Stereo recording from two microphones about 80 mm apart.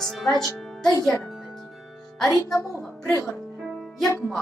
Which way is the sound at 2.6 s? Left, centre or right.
Centre.